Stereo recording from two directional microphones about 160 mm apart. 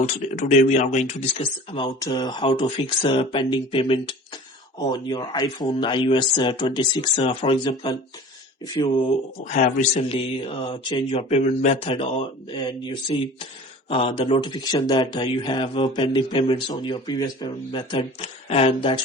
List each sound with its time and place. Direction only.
0.0 s speech: 50° left (ahead or behind); by 1.9 s 35° left (ahead or behind)
2.0 s speech: 25° left (ahead or behind)
9.4 s speech: 50° left (ahead or behind)